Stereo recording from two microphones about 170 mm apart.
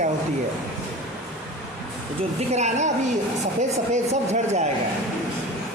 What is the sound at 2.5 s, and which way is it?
Speech, 40° right (ahead or behind).